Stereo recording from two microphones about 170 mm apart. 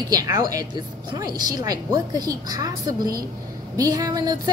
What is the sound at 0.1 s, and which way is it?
A woman's voice, 20° right (ahead or behind).